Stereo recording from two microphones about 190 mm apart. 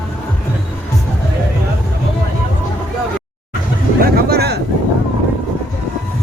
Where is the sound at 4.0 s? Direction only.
55° right (ahead or behind).